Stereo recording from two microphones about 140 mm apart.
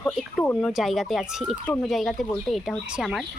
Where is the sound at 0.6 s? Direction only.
Centre (ahead or behind).